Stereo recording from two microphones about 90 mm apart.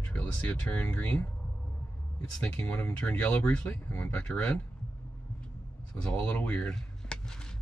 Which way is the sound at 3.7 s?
25° left (ahead or behind).